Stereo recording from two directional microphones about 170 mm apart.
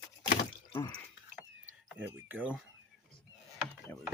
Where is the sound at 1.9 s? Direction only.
10° right (ahead or behind).